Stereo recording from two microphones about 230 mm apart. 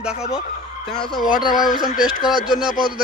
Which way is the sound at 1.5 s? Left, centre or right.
Centre.